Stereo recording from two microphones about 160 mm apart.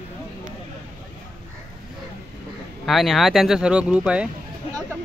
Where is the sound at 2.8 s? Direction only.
Centre (ahead or behind).